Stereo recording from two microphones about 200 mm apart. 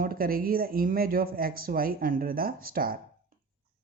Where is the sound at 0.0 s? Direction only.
45° right (ahead or behind).